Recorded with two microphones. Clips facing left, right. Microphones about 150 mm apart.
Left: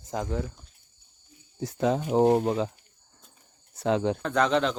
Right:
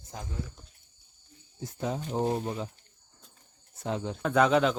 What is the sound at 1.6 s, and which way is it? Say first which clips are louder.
Speech: left 8 dB; 85° left.